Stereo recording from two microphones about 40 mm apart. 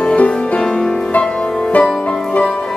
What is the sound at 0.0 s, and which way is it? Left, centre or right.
Music, left.